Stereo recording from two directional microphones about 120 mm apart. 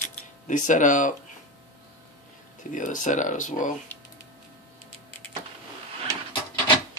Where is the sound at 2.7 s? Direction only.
90° left.